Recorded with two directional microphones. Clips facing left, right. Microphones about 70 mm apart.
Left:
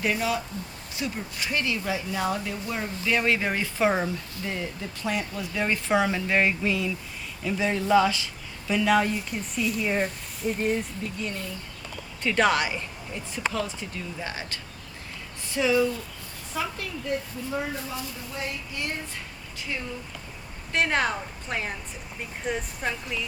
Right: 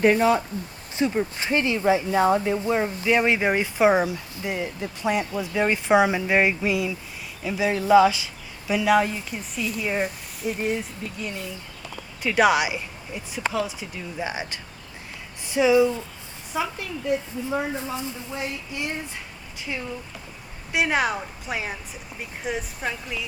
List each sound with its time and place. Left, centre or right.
0.0 s speech: right
20.7 s speech: centre